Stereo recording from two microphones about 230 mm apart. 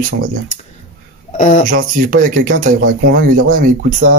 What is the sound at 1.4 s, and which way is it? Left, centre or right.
Speech, left.